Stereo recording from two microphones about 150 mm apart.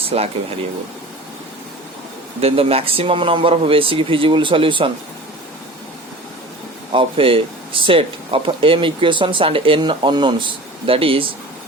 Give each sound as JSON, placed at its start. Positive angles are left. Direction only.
{"t": 0.1, "sound": "speech", "side_deg": -40}
{"t": 2.4, "sound": "speech", "side_deg": -40}
{"t": 6.9, "sound": "speech", "side_deg": -35}